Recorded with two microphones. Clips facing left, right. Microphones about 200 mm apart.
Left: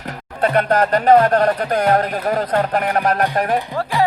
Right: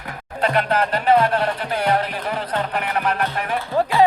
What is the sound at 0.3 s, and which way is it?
Speech, 50° left (ahead or behind).